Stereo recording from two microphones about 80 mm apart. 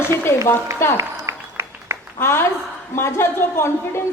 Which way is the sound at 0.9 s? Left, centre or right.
Right.